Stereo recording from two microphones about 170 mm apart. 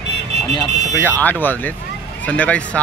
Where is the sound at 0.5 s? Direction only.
20° left (ahead or behind).